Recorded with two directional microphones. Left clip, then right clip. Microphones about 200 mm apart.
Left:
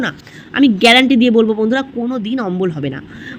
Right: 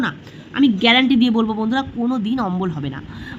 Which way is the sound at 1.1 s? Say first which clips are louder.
Left 7 dB; 5° left (ahead or behind).